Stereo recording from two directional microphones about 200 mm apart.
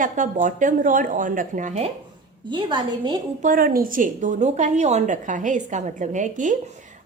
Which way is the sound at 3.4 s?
45° right (ahead or behind).